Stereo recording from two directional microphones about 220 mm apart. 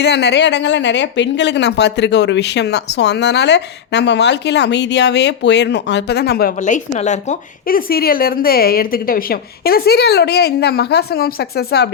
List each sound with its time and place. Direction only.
0.0 s speech: 50° left (ahead or behind)